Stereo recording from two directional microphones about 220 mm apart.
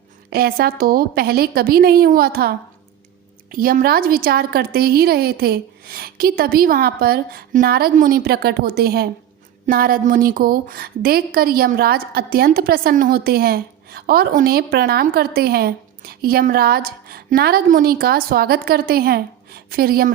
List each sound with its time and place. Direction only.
0.3 s a woman's voice: 45° right (ahead or behind)